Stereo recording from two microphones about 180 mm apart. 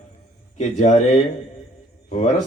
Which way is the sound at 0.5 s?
40° left (ahead or behind).